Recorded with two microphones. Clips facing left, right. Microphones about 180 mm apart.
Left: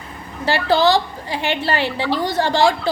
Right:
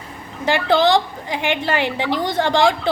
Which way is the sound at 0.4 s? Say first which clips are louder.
Even; 20° right (ahead or behind).